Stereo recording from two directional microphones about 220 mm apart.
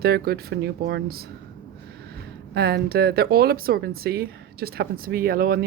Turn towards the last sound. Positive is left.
turn(degrees=-45)  # may be behind; listen again after turning